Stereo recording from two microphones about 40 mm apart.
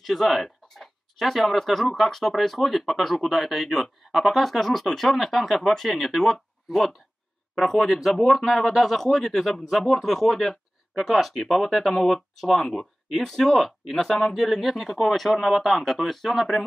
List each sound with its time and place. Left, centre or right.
0.0 s speech: centre